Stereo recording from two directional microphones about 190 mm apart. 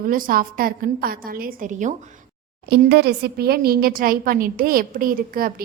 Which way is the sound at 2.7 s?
55° right (ahead or behind).